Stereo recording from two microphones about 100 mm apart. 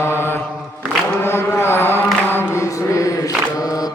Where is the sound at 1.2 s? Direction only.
25° left (ahead or behind).